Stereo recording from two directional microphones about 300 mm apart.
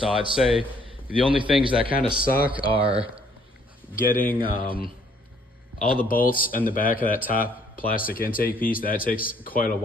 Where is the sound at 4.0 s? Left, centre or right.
Left.